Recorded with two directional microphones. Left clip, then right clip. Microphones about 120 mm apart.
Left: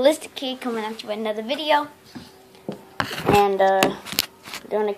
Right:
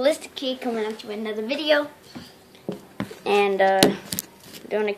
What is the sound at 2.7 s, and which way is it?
Rub, 10° left (ahead or behind).